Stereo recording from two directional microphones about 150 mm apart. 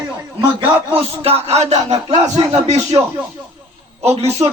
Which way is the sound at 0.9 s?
40° right (ahead or behind).